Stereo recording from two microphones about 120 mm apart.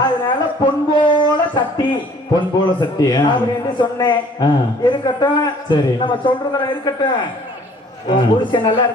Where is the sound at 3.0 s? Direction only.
35° left (ahead or behind).